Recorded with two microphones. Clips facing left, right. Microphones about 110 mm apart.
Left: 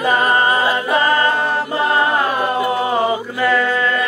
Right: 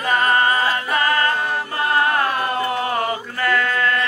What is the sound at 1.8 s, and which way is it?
Music, 20° left (ahead or behind).